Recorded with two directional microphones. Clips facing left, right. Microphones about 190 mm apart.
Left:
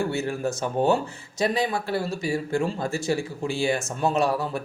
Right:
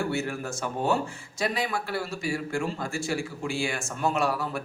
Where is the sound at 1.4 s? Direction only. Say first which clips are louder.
Left 4 dB; 20° left (ahead or behind).